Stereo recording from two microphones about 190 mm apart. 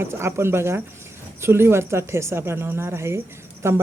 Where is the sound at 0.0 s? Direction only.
15° right (ahead or behind).